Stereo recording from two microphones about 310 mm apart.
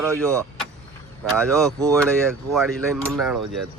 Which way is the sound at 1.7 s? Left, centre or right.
Centre.